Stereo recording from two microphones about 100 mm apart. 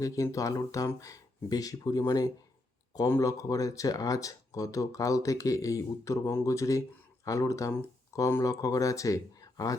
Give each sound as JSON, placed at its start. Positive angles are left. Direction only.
{"t": 0.0, "sound": "speech", "side_deg": 35}